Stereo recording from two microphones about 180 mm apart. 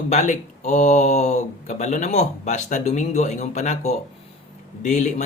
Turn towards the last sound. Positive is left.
turn(degrees=40)  # may be behind; listen again after turning